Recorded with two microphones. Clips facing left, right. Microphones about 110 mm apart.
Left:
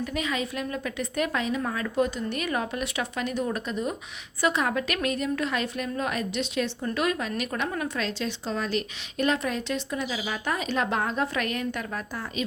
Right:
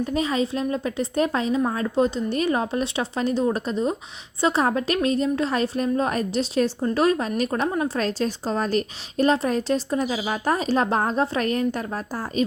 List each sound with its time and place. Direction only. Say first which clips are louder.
0.0 s a woman's voice: right 6 dB; 30° right (ahead or behind)
7.9 s a woman's voice: right 6 dB; 40° right (ahead or behind)